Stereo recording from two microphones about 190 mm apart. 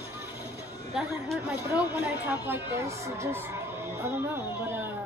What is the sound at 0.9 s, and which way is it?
Speech, 5° right (ahead or behind).